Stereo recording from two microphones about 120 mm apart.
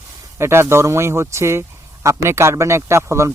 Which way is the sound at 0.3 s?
20° right (ahead or behind).